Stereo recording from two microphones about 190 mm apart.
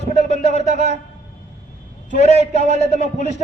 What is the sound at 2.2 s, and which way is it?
A man's voice, 35° left (ahead or behind).